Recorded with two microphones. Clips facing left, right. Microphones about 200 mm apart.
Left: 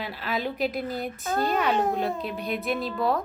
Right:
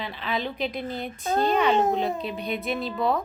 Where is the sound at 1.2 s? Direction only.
25° right (ahead or behind).